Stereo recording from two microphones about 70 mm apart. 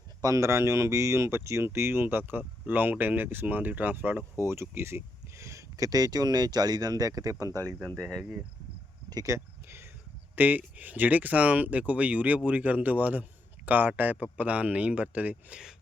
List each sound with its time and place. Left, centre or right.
0.2 s speech: right
4.4 s speech: right
7.9 s speech: centre
8.2 s speech: right
9.0 s a sound: right
9.3 s a sound: right
10.3 s speech: right